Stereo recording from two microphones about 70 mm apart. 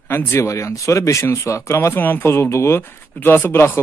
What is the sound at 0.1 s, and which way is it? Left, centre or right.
Speech, left.